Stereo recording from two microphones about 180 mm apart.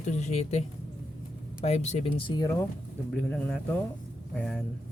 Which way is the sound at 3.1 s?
5° left (ahead or behind).